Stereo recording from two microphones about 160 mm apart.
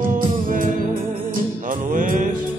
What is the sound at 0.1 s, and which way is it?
Music, 60° right (ahead or behind).